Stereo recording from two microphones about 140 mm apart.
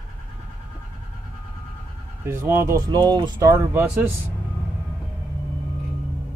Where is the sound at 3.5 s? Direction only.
15° right (ahead or behind).